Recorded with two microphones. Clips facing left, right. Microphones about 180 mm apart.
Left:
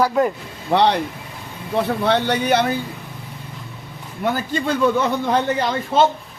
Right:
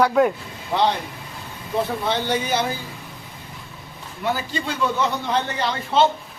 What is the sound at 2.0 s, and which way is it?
Speech, 65° left (ahead or behind).